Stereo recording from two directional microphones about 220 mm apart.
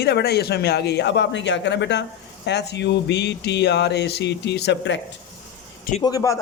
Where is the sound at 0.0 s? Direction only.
45° left (ahead or behind).